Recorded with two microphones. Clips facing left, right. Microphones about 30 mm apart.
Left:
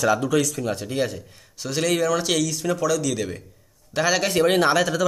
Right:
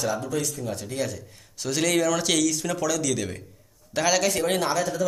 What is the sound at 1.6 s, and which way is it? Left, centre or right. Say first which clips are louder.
A man's voice: left 1 dB; centre.